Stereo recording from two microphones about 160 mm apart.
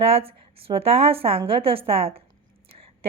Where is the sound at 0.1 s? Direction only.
35° right (ahead or behind).